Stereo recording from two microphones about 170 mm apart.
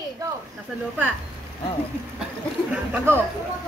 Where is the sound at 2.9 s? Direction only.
15° right (ahead or behind).